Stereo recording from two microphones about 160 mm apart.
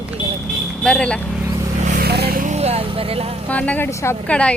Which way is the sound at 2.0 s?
80° right.